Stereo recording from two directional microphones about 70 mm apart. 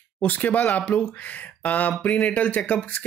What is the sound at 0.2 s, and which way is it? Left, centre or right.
Speech, left.